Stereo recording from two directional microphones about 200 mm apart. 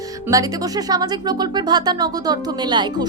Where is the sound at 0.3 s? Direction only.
15° right (ahead or behind).